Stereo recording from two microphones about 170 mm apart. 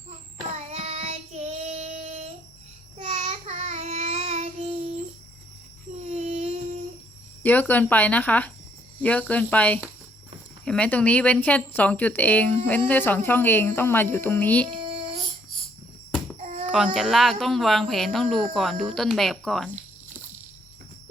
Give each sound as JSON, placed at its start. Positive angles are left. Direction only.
{"t": 0.5, "sound": "child singing", "side_deg": -40}
{"t": 6.1, "sound": "child singing", "side_deg": -45}
{"t": 7.4, "sound": "speech", "side_deg": 10}
{"t": 16.4, "sound": "a sound", "side_deg": -45}
{"t": 16.7, "sound": "speech", "side_deg": -5}